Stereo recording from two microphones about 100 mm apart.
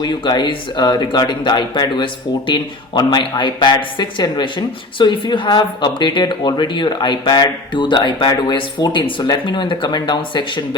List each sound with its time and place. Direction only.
0.0 s speech: 50° left (ahead or behind)